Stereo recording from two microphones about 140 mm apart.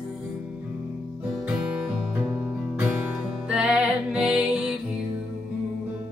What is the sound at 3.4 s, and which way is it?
Music, 5° right (ahead or behind).